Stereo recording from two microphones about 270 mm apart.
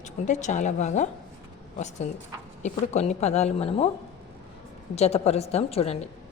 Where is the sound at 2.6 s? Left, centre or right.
Left.